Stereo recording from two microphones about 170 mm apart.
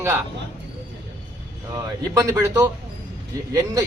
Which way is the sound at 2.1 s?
20° right (ahead or behind).